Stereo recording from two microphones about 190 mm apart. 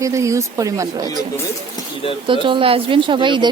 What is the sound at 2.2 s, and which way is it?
A woman's voice, 25° right (ahead or behind).